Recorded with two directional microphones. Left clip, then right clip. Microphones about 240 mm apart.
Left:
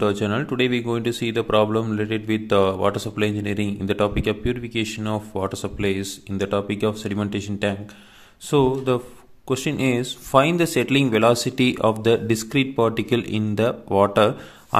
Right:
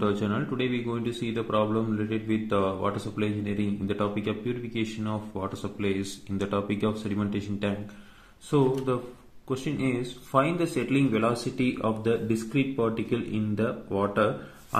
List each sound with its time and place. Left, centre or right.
0.0 s speech: left